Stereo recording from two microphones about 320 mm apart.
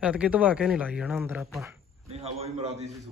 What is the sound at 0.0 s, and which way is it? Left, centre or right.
Speech, centre.